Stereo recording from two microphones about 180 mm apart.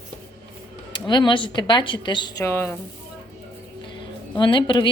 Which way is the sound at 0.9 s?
25° left (ahead or behind).